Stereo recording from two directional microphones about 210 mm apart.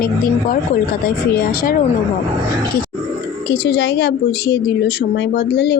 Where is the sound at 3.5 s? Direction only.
50° left (ahead or behind).